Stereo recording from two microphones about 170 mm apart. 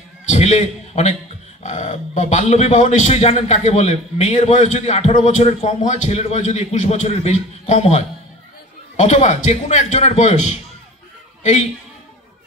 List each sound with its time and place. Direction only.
0.3 s a man's voice: 40° left (ahead or behind)